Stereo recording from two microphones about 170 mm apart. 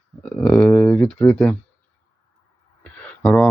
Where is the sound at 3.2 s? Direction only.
10° left (ahead or behind).